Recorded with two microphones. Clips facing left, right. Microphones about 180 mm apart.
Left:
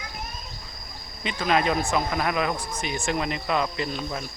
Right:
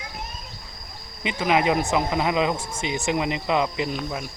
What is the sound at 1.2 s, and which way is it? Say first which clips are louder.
Speech: right 2 dB; 15° right (ahead or behind).